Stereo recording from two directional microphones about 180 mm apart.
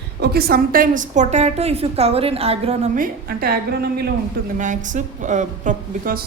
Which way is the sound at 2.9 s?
55° right (ahead or behind).